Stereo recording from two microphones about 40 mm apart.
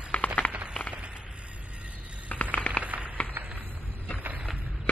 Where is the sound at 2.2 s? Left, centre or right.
Left.